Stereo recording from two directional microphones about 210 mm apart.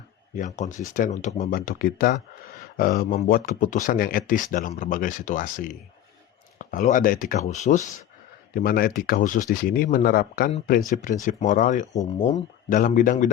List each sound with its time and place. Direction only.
0.3 s speech: 35° left (ahead or behind)
8.5 s speech: 45° left (ahead or behind)